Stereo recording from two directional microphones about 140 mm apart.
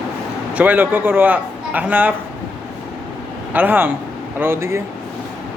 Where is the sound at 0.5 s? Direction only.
10° right (ahead or behind).